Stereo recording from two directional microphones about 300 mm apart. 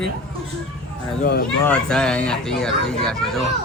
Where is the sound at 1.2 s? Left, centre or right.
Left.